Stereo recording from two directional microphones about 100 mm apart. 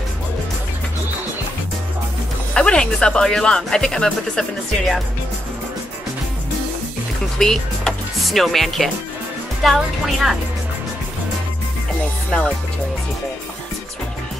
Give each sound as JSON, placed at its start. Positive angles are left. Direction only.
{"t": 2.5, "sound": "speech", "side_deg": 10}
{"t": 7.3, "sound": "a woman's voice", "side_deg": 5}
{"t": 12.3, "sound": "speech", "side_deg": 10}